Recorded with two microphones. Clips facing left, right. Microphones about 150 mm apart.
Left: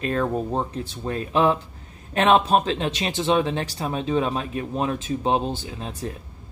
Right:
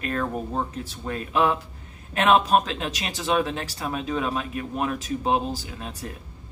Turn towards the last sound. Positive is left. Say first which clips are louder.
# left 4 dB
turn(degrees=30)  # may be behind; listen again after turning